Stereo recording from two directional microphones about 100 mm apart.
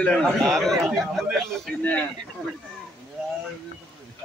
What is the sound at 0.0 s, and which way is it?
Speech, 5° left (ahead or behind).